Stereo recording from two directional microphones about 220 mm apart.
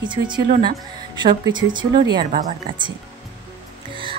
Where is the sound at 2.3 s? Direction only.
35° right (ahead or behind).